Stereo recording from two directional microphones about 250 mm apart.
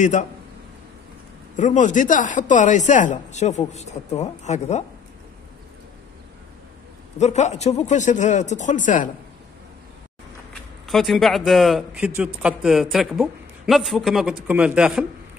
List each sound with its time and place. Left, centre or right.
0.0 s speech: left
1.6 s speech: left
7.2 s speech: left
10.9 s speech: centre